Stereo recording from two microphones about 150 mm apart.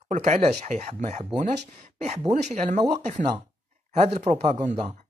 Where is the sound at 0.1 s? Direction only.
55° right (ahead or behind).